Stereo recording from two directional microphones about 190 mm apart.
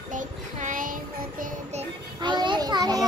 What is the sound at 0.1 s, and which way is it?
Child singing, 45° right (ahead or behind).